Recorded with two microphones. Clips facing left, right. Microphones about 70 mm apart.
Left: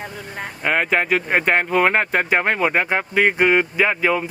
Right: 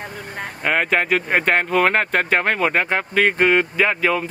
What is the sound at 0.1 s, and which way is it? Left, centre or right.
Speech, right.